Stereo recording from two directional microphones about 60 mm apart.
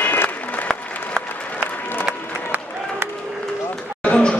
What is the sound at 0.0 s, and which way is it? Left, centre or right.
Applause, left.